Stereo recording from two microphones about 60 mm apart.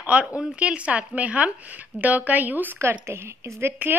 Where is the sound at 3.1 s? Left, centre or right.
Right.